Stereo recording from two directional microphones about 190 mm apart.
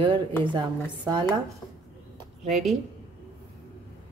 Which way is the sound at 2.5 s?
Centre (ahead or behind).